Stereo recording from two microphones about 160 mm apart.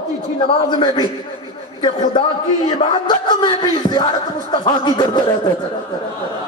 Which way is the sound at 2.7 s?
30° left (ahead or behind).